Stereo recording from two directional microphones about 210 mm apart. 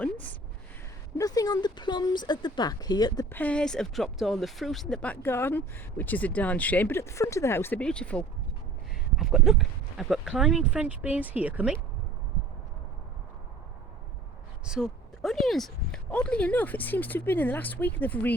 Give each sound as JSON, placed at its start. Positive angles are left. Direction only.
{"t": 1.2, "sound": "speech", "side_deg": 15}
{"t": 3.3, "sound": "speech", "side_deg": 5}
{"t": 14.6, "sound": "speech", "side_deg": 0}